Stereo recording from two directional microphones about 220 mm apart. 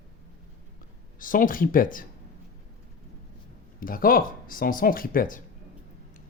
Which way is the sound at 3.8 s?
40° left (ahead or behind).